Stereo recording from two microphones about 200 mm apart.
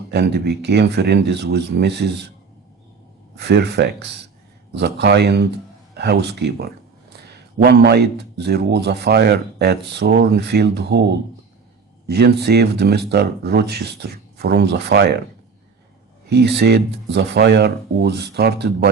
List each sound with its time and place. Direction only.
0.1 s a man's voice: 55° right (ahead or behind)
3.3 s a man's voice: 55° right (ahead or behind)
16.3 s a man's voice: 55° right (ahead or behind)